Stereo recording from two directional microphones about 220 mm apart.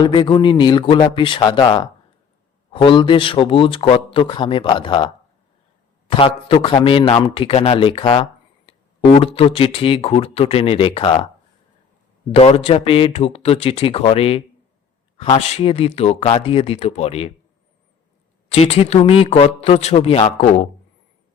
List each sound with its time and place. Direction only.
0.0 s a man's voice: 20° left (ahead or behind)
6.1 s a man's voice: 25° left (ahead or behind)
12.3 s a man's voice: 25° left (ahead or behind)
18.4 s a man's voice: 25° left (ahead or behind)